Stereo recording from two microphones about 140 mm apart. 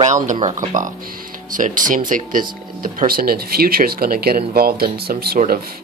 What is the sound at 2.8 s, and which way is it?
Speech, 90° right.